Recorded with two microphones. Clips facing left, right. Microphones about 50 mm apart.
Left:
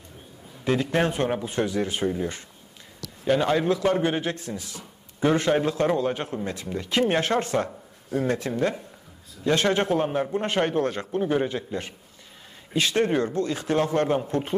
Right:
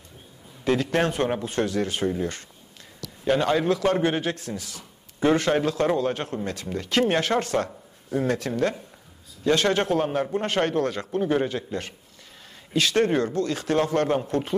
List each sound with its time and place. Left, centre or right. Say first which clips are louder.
0.9 s a man's voice: even; centre
3.3 s a man's voice: even; centre
14.2 s speech: right 1 dB; centre